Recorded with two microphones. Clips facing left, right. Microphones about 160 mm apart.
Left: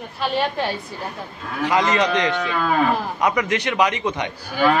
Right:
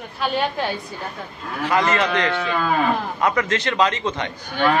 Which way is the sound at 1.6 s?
15° left (ahead or behind).